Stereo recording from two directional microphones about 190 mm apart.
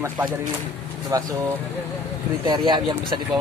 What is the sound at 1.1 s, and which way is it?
Speech, 20° right (ahead or behind).